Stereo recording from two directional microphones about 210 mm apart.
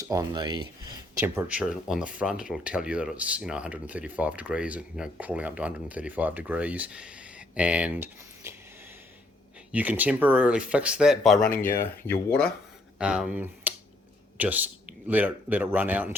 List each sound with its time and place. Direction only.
0.0 s speech: 15° right (ahead or behind)
8.4 s a sound: 15° right (ahead or behind)
9.7 s speech: 5° right (ahead or behind); by 12.5 s 10° left (ahead or behind)
13.0 s speech: 5° right (ahead or behind)